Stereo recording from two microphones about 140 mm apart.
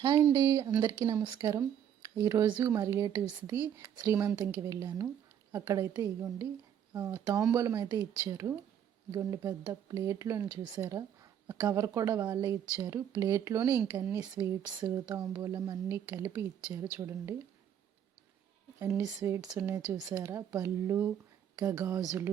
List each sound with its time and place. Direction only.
0.0 s speech: 25° right (ahead or behind)
1.5 s speech: 25° right (ahead or behind)
7.5 s speech: 20° right (ahead or behind)
18.9 s speech: 15° right (ahead or behind)